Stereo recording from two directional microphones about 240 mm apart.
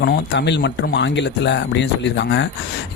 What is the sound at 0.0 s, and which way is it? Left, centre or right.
Speech, left.